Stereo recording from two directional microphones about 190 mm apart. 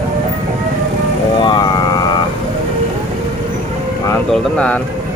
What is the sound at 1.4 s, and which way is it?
Vehicle, 25° left (ahead or behind).